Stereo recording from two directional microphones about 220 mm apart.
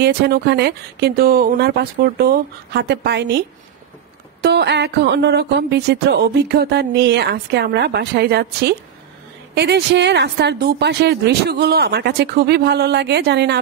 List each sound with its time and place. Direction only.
0.0 s speech: 50° right (ahead or behind)